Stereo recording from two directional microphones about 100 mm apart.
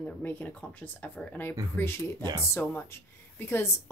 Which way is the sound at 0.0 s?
15° left (ahead or behind).